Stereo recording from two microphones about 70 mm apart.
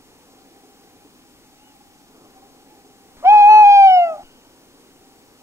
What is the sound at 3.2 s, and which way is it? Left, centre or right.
Hoot, right.